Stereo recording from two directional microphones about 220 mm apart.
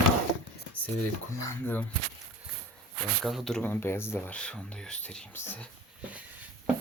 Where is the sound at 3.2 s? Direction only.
Centre (ahead or behind).